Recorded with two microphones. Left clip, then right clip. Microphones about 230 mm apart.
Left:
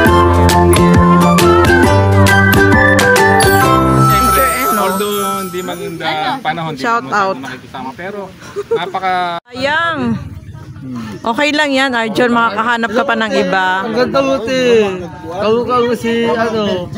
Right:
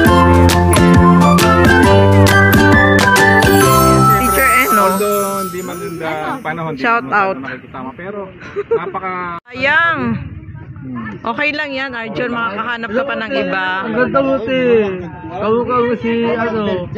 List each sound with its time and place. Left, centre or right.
0.0 s music: centre
6.8 s speech: centre
9.0 s speech: left
9.6 s speech: left
11.2 s a man's voice: left
14.1 s speech: left